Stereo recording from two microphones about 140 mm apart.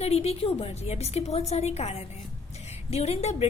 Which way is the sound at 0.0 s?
50° left (ahead or behind).